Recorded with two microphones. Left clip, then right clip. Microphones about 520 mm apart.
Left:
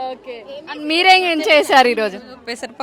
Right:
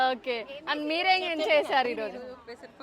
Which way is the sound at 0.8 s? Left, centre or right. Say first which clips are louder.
Left 14 dB; centre.